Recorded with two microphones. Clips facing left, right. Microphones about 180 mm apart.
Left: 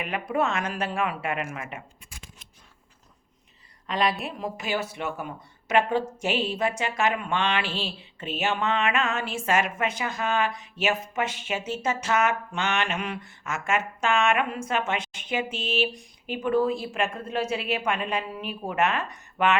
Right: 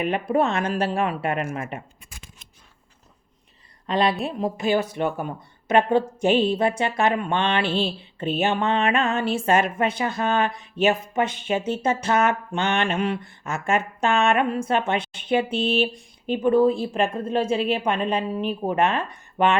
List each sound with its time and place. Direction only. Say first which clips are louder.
0.0 s mantra: right 5 dB; 30° right (ahead or behind)
3.8 s a woman's voice: right 4 dB; 30° right (ahead or behind)
4.3 s mantra: right 7 dB; 30° right (ahead or behind)
16.3 s a woman's voice: right 6 dB; 30° right (ahead or behind)